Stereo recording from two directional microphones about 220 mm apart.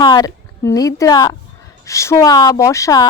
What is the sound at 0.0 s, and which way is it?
A woman's voice, 20° left (ahead or behind).